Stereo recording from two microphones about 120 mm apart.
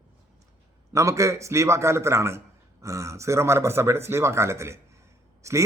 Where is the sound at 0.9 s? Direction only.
25° right (ahead or behind).